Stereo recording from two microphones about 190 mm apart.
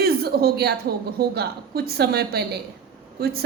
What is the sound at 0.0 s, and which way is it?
A woman's voice, 55° right (ahead or behind).